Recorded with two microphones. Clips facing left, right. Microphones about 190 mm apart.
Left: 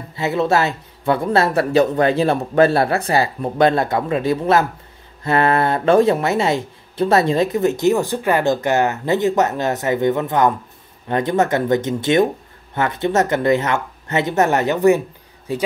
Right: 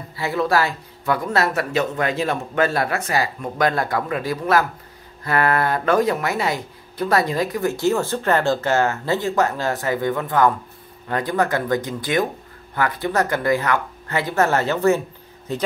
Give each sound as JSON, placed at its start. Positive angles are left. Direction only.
{"t": 0.1, "sound": "speech", "side_deg": 20}